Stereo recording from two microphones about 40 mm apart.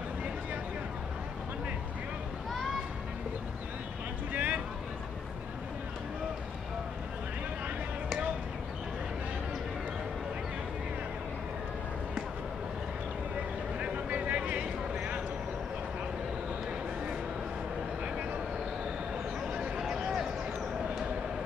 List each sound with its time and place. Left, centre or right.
4.3 s vehicle: right
13.7 s vehicle: right
19.5 s a sound: right